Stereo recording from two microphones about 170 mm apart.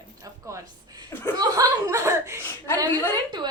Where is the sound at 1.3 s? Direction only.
20° right (ahead or behind).